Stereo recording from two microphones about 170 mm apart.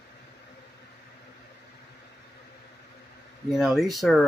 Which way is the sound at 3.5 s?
Centre (ahead or behind).